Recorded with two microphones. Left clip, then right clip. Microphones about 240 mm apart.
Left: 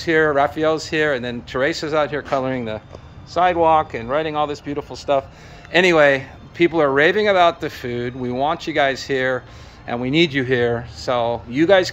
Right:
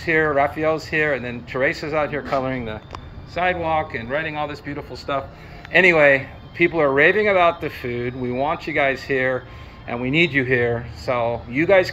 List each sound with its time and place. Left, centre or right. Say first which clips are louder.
0.0 s speech: left 2 dB; left